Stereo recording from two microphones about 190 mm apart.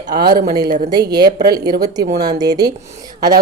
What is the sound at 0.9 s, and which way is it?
A woman's voice, 20° right (ahead or behind).